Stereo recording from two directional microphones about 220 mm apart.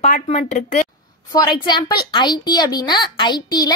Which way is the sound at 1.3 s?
20° left (ahead or behind).